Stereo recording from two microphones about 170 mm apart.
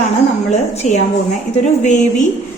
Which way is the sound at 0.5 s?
40° left (ahead or behind).